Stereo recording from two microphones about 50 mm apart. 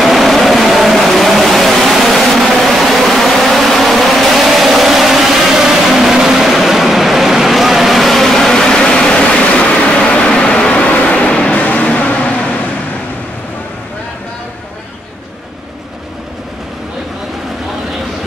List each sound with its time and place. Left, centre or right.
0.0 s vehicle: centre; by 12.5 s left